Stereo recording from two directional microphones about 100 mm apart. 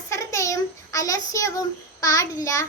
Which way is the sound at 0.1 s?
30° left (ahead or behind).